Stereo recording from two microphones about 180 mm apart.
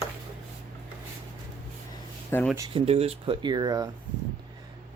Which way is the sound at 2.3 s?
15° left (ahead or behind).